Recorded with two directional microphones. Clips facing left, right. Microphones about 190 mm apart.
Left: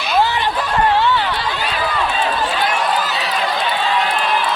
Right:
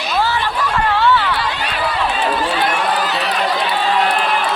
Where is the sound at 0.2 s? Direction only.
20° left (ahead or behind).